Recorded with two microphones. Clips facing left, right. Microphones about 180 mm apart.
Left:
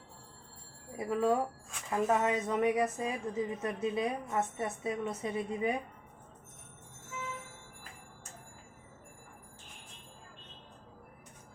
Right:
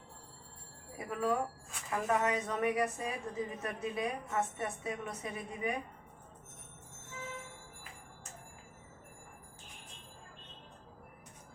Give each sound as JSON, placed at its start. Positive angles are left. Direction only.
{"t": 0.9, "sound": "a woman's voice", "side_deg": 25}